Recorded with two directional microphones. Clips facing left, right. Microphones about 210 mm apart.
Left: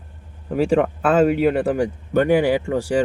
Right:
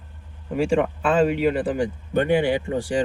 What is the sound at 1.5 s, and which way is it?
Speech, 60° left (ahead or behind).